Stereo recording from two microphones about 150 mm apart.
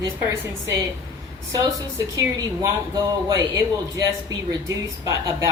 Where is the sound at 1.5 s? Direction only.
20° right (ahead or behind).